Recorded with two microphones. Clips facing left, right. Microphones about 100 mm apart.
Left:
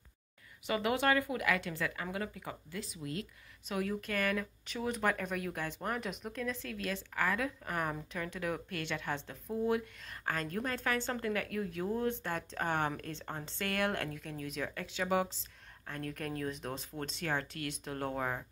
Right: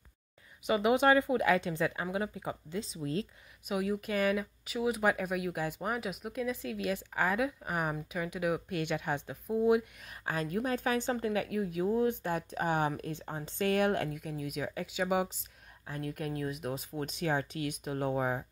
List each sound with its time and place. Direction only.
0.7 s speech: 20° right (ahead or behind)
3.6 s speech: 15° right (ahead or behind)